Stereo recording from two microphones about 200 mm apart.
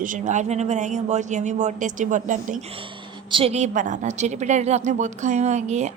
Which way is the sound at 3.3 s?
25° right (ahead or behind).